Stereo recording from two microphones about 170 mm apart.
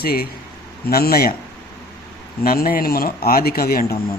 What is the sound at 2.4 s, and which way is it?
Speech, 60° left (ahead or behind).